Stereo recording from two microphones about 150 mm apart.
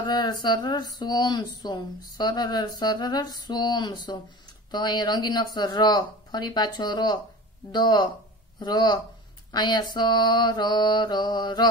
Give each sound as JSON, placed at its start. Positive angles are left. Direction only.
{"t": 0.0, "sound": "speech", "side_deg": 30}